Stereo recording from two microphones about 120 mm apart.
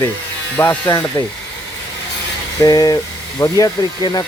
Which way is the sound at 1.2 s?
30° left (ahead or behind).